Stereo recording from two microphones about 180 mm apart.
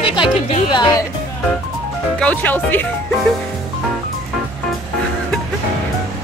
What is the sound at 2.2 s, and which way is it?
Speech, 10° left (ahead or behind).